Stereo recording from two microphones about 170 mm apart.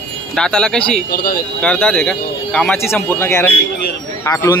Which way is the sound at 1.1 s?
60° left (ahead or behind).